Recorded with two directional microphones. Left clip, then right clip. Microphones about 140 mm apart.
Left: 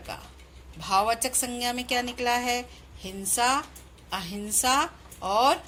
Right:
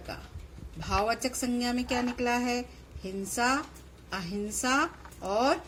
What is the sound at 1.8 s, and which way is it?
Speech, 15° left (ahead or behind).